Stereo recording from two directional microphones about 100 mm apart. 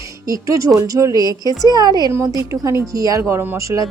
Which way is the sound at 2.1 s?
30° right (ahead or behind).